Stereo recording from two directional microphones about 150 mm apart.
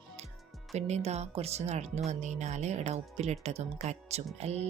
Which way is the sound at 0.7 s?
45° right (ahead or behind).